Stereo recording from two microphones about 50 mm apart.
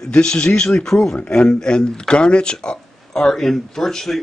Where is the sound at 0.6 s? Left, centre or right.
Centre.